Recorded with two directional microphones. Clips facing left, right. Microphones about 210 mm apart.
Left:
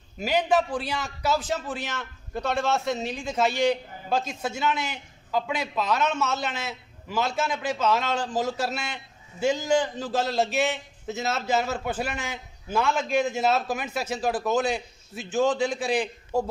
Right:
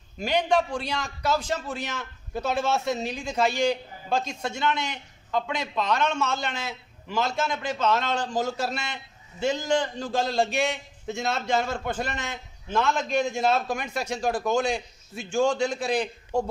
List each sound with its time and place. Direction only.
0.2 s a man's voice: 5° left (ahead or behind)